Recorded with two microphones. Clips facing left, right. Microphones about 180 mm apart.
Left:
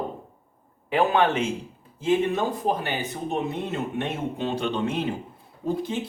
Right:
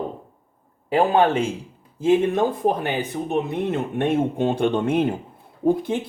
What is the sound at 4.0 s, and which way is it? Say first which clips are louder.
Speech: right 8 dB; 50° right (ahead or behind).